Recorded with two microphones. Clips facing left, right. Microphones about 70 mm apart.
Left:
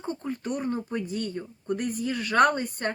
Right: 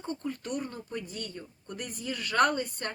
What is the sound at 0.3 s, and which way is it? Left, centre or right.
Speech, left.